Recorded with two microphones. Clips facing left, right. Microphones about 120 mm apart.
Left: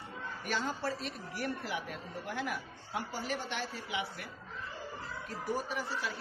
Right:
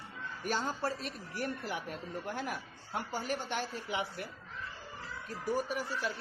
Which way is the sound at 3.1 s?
50° right (ahead or behind).